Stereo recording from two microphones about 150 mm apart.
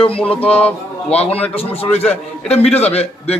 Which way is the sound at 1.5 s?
40° left (ahead or behind).